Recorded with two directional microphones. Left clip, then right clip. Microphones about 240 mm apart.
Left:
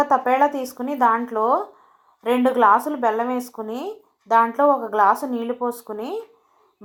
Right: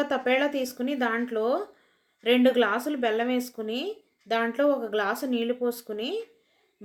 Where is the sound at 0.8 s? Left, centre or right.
Left.